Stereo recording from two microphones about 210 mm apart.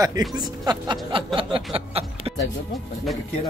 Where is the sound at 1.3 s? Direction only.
25° right (ahead or behind).